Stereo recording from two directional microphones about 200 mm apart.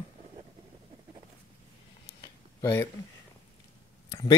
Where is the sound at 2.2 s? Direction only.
20° left (ahead or behind).